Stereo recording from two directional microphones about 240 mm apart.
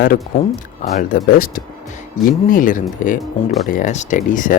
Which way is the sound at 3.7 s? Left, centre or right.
Left.